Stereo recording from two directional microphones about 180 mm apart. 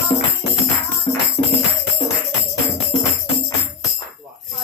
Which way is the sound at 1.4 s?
30° left (ahead or behind).